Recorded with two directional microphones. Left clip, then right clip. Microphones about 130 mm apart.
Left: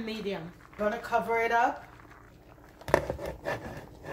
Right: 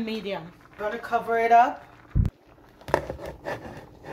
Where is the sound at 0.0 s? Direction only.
85° right.